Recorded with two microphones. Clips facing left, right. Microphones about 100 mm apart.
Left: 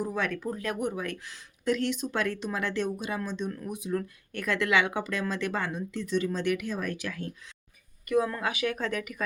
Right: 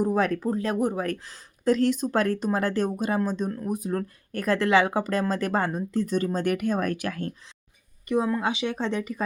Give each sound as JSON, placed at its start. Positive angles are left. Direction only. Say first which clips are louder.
{"t": 0.0, "sound": "speech", "louder": "right 7 dB", "side_deg": -40}
{"t": 8.0, "sound": "a woman's voice", "louder": "right 3 dB", "side_deg": -25}